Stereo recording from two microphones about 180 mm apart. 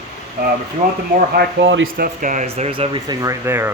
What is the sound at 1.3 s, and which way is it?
Speech, 80° right.